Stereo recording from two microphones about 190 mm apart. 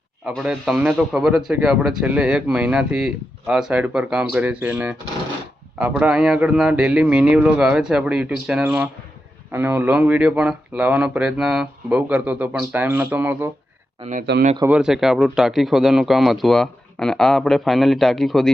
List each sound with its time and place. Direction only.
0.3 s a man's voice: 5° right (ahead or behind)
14.0 s speech: 40° right (ahead or behind)
14.7 s a man's voice: 5° right (ahead or behind)